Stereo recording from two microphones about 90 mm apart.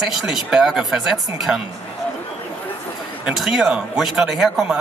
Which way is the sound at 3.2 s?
5° right (ahead or behind).